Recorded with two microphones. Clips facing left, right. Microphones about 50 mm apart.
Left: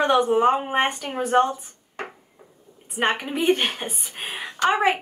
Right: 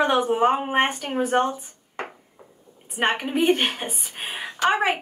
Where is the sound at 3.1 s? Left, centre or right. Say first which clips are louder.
Right 1 dB; centre.